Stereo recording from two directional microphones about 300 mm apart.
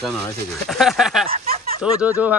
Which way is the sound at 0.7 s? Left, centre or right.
Centre.